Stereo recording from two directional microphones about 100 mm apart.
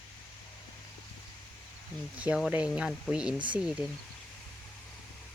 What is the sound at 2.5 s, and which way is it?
Speech, 10° right (ahead or behind).